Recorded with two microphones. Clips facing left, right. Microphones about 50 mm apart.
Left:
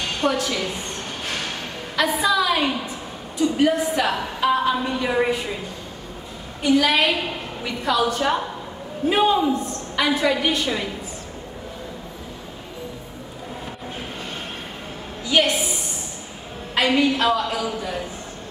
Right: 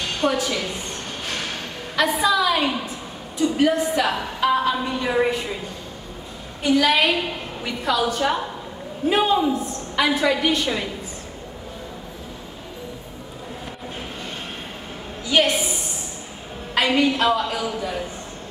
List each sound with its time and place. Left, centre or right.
0.2 s a woman's voice: centre
2.0 s a woman's voice: centre
6.6 s a woman's voice: centre
15.3 s a sound: centre
16.7 s a woman's voice: centre